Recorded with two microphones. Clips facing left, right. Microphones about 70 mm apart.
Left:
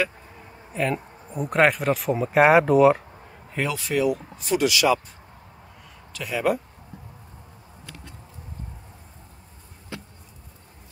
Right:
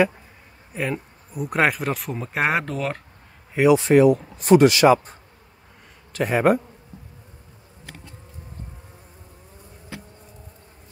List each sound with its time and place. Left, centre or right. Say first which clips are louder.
0.7 s speech: left 2 dB; centre
3.5 s speech: right 11 dB; centre
3.8 s speech: right 8 dB; right
6.1 s speech: right 6 dB; right